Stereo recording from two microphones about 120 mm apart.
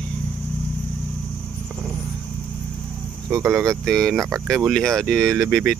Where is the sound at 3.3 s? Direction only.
25° right (ahead or behind).